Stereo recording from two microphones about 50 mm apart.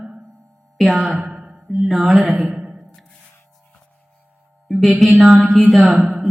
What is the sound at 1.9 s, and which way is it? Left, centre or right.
Mantra, centre.